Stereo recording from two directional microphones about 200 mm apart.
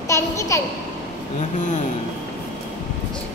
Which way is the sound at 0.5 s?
15° left (ahead or behind).